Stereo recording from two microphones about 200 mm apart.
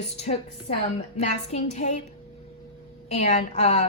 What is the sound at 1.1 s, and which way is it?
Speech, 30° left (ahead or behind).